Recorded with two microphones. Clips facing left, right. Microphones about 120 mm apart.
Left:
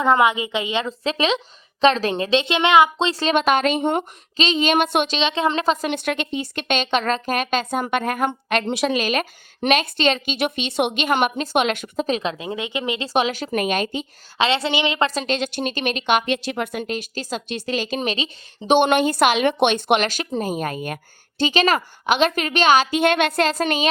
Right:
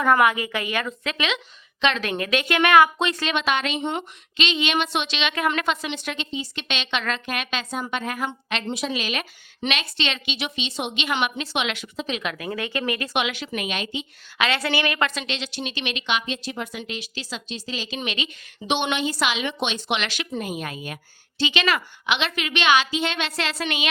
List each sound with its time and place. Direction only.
0.0 s a woman's voice: 20° left (ahead or behind)
3.1 s a woman's voice: 30° left (ahead or behind)
3.3 s a woman's voice: 45° left (ahead or behind)
5.9 s a woman's voice: 55° left (ahead or behind)
12.2 s a woman's voice: 25° left (ahead or behind)
13.1 s a woman's voice: 40° left (ahead or behind)
14.3 s a woman's voice: 25° left (ahead or behind); by 16.8 s 65° left (ahead or behind)
16.8 s a woman's voice: 45° left (ahead or behind)
18.8 s a woman's voice: 50° left (ahead or behind)